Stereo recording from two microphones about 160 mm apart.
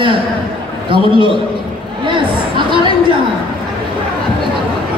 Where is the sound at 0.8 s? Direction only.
30° right (ahead or behind).